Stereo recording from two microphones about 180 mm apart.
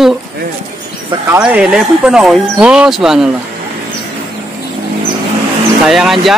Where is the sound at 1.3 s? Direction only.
5° right (ahead or behind).